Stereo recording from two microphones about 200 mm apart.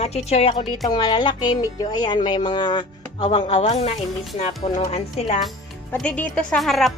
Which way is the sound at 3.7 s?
35° left (ahead or behind).